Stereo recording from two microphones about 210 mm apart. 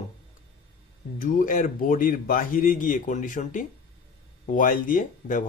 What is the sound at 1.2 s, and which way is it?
Speech, 40° left (ahead or behind).